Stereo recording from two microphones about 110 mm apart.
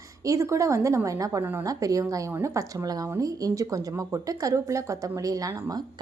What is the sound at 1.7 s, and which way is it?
A woman's voice, 30° right (ahead or behind).